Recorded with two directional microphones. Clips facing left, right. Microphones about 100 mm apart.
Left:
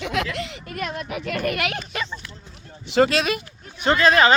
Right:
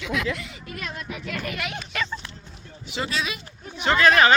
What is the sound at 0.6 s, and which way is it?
Speech, 50° left (ahead or behind).